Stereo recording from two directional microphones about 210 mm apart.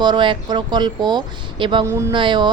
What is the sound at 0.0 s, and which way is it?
A woman's voice, 20° right (ahead or behind).